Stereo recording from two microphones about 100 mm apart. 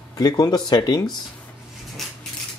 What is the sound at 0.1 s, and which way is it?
Speech, 40° left (ahead or behind).